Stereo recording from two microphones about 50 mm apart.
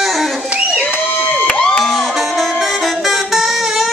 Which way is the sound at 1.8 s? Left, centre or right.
Centre.